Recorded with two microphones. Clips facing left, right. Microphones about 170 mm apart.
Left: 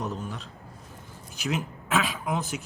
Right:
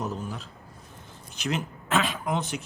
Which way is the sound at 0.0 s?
Centre (ahead or behind).